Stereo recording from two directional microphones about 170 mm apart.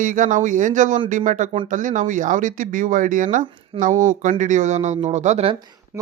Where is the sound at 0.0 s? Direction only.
50° right (ahead or behind).